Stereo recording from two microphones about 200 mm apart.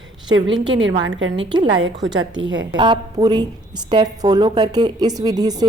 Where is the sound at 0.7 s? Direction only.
65° right (ahead or behind).